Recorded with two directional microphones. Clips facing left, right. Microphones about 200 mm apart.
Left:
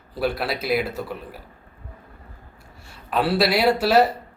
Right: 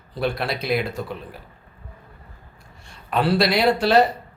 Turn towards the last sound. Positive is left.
turn(degrees=5)  # may be behind; listen again after turning